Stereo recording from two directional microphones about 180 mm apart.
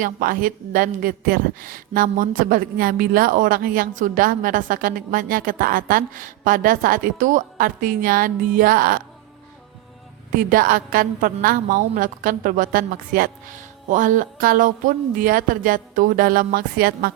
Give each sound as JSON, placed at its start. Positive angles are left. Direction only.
{"t": 0.0, "sound": "a woman's voice", "side_deg": -50}
{"t": 10.3, "sound": "a woman's voice", "side_deg": -50}